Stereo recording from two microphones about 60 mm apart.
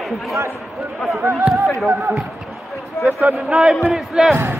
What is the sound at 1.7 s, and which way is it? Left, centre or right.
Speech, right.